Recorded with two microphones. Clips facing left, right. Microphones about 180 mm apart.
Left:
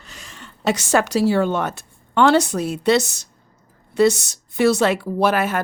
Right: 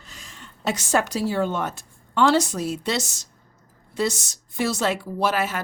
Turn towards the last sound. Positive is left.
turn(degrees=55)  # may be behind; listen again after turning